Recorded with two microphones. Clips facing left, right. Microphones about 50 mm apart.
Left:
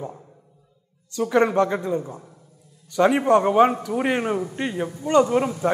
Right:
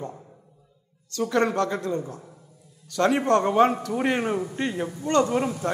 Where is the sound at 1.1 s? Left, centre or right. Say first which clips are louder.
Left 4 dB; centre.